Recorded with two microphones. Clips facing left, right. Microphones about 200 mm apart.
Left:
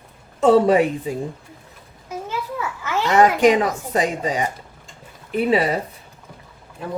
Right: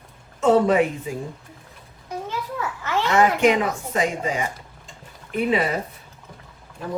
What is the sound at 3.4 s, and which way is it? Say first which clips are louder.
Speech: left 3 dB; 40° left (ahead or behind).